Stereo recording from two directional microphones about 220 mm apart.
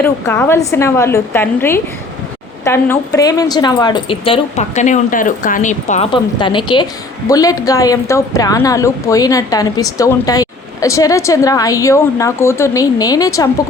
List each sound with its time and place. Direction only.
0.0 s a woman's voice: 10° left (ahead or behind); by 6.1 s 35° left (ahead or behind)
6.4 s a woman's voice: 20° left (ahead or behind)